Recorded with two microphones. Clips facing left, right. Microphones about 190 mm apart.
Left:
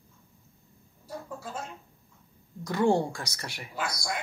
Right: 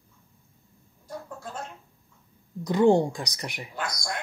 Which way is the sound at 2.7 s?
20° right (ahead or behind).